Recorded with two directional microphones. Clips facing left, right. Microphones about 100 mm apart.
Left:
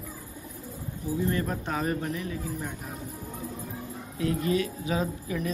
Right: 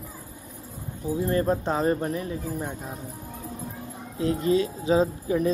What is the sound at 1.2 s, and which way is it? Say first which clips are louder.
Speech: right 9 dB; 30° right (ahead or behind).